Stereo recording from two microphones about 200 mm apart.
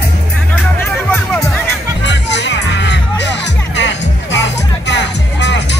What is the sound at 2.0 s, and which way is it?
Music, 60° left (ahead or behind).